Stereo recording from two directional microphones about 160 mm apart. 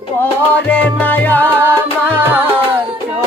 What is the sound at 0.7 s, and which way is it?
Music, 10° left (ahead or behind).